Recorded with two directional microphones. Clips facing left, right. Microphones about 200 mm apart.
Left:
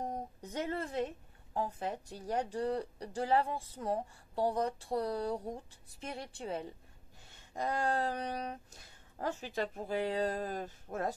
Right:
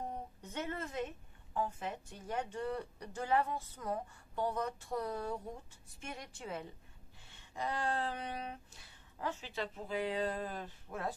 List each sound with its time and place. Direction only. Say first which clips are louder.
0.0 s speech: left 4 dB; 40° left (ahead or behind)
7.2 s a sound: left 3 dB; 45° left (ahead or behind)
9.6 s speech: left 3 dB; 45° left (ahead or behind)